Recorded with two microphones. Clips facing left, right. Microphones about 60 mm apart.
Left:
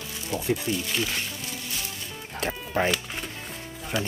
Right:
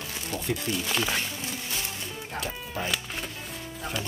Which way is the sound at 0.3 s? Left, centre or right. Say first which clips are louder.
Left 5 dB; left.